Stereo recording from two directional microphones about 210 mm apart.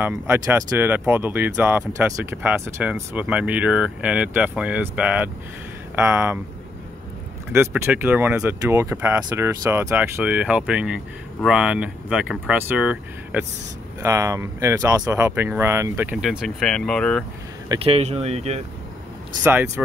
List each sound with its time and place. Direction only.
0.0 s speech: 10° right (ahead or behind)
7.5 s speech: 10° right (ahead or behind)
17.6 s speech: 30° right (ahead or behind)
19.4 s speech: 10° right (ahead or behind)